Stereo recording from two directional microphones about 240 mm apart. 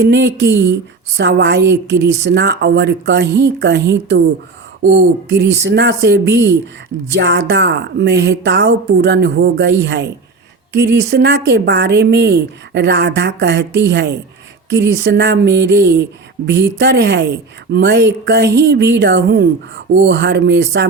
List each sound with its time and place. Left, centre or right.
0.0 s speech: right